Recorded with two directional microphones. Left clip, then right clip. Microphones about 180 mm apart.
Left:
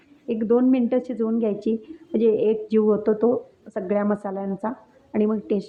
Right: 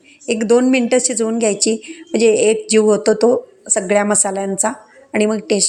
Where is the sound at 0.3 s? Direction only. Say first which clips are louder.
Right 7 dB; 15° right (ahead or behind).